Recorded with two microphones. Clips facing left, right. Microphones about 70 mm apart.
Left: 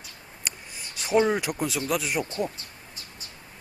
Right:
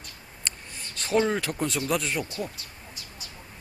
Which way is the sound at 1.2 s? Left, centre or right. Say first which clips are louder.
Left 2 dB; centre.